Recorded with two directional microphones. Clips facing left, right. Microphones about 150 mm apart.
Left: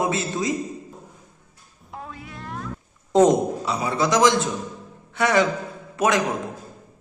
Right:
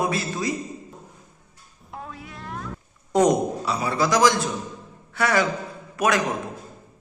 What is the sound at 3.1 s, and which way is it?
A man's voice, 25° left (ahead or behind).